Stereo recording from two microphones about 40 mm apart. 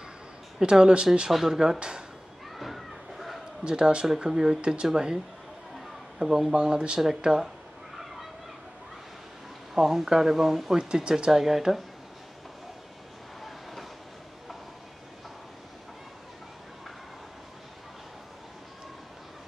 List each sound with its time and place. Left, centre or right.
0.6 s speech: centre
1.3 s speech: centre
1.8 s speech: right
2.5 s a sound: centre
3.6 s speech: right
9.8 s speech: centre
10.8 s speech: centre